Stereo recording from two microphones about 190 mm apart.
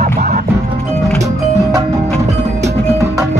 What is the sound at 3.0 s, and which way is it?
Music, 15° right (ahead or behind).